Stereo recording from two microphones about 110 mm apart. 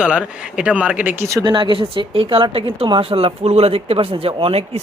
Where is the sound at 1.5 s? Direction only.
45° right (ahead or behind).